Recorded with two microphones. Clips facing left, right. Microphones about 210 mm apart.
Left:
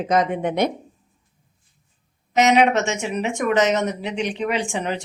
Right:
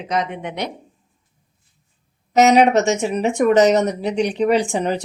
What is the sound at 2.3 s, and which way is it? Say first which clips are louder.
Speech: right 4 dB; 40° right (ahead or behind).